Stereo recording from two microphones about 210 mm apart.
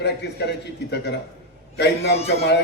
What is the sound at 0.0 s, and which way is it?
Speech, 55° left (ahead or behind).